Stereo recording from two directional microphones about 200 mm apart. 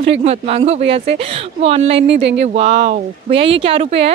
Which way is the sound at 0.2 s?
30° right (ahead or behind).